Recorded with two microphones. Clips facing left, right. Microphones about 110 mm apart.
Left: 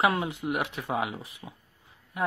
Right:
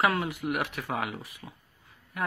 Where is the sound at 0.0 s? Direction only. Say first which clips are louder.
Left 1 dB; 20° left (ahead or behind).